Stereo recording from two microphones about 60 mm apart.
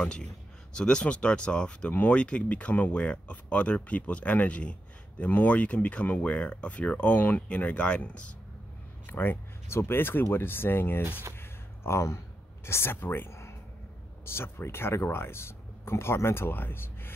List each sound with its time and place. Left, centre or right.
0.0 s speech: centre
9.0 s speech: left
11.3 s a sound: left
12.6 s speech: left
13.3 s a sound: left
14.2 s speech: left